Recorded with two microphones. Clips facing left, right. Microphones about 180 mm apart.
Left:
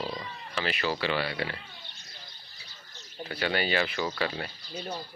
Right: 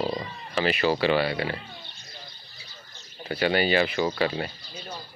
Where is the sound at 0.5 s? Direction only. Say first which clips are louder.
Right 7 dB; 10° right (ahead or behind).